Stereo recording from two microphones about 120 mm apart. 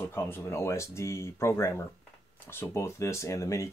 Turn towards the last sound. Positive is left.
turn(degrees=25)  # may be behind; listen again after turning